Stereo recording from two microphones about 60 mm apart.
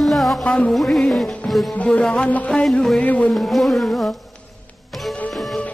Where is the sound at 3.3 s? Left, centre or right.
Centre.